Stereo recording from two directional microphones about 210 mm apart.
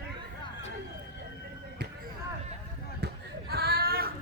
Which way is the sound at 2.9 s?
45° right (ahead or behind).